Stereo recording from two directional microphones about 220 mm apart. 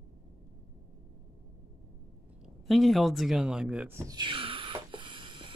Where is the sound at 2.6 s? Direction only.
Centre (ahead or behind).